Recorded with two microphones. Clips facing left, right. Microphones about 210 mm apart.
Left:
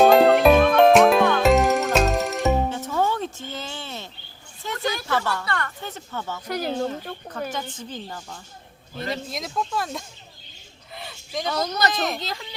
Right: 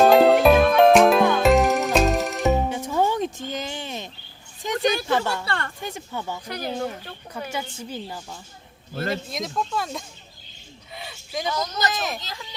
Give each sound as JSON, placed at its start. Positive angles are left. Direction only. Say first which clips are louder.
{"t": 0.0, "sound": "music", "louder": "even", "side_deg": 0}
{"t": 2.6, "sound": "music", "louder": "right 1 dB", "side_deg": -15}
{"t": 4.6, "sound": "a sound", "louder": "right 5 dB", "side_deg": -15}
{"t": 5.0, "sound": "speech", "louder": "right 2 dB", "side_deg": -20}
{"t": 5.5, "sound": "a woman's voice", "louder": "even", "side_deg": -30}
{"t": 5.8, "sound": "a woman's voice", "louder": "right 1 dB", "side_deg": -15}
{"t": 7.5, "sound": "a woman's voice", "louder": "right 1 dB", "side_deg": -10}
{"t": 10.9, "sound": "a sound", "louder": "even", "side_deg": 0}
{"t": 11.4, "sound": "speech", "louder": "left 3 dB", "side_deg": 65}
{"t": 11.9, "sound": "speech", "louder": "left 3 dB", "side_deg": 0}